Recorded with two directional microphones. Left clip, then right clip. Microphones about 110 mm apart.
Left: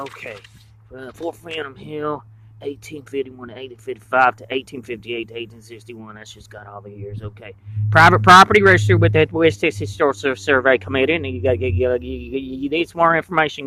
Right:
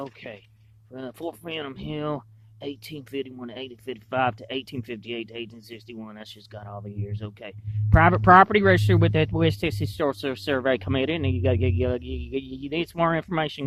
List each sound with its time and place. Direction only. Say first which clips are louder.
0.9 s speech: left 5 dB; 50° right (ahead or behind)
7.9 s speech: left 7 dB; 35° right (ahead or behind)